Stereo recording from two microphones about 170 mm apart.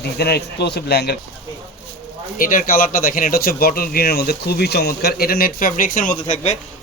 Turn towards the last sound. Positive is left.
turn(degrees=45)  # may be behind; listen again after turning